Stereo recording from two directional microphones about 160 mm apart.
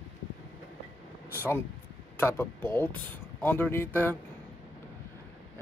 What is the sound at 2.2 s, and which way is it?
Speech, 15° left (ahead or behind).